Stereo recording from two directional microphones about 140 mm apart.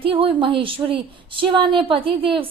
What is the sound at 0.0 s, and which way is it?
A woman's voice, 40° right (ahead or behind).